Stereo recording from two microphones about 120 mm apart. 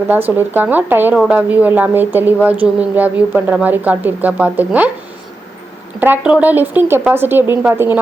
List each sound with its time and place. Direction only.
0.1 s speech: 15° right (ahead or behind)
6.0 s speech: 10° right (ahead or behind)